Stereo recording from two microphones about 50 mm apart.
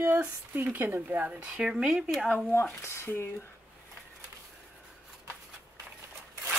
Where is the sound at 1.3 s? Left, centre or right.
Right.